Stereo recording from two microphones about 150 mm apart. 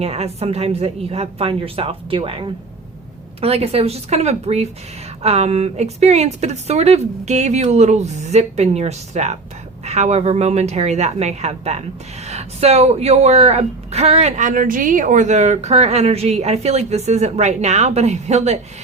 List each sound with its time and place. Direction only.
0.0 s speech: 45° right (ahead or behind)